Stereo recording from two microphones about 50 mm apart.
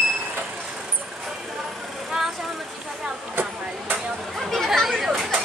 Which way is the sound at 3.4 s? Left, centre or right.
Right.